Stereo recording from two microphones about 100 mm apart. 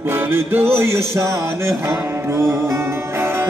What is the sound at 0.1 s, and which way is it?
Music, 20° right (ahead or behind).